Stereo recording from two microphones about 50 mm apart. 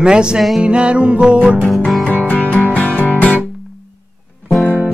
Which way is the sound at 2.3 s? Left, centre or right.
Left.